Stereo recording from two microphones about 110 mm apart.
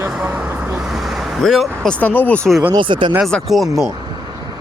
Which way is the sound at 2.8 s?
50° right (ahead or behind).